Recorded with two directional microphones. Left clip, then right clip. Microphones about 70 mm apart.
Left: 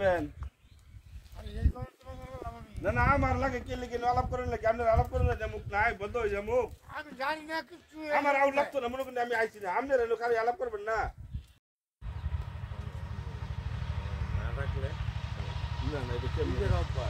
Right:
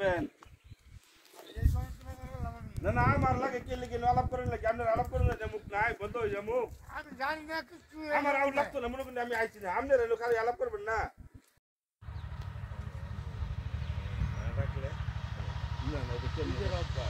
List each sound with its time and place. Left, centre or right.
2.2 s a sound: centre
2.8 s speech: centre
5.7 s speech: centre
6.9 s a man's voice: left
8.1 s speech: left
8.4 s speech: centre
12.3 s vehicle: centre